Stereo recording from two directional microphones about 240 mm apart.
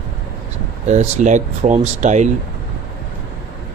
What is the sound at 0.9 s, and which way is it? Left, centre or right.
Speech, right.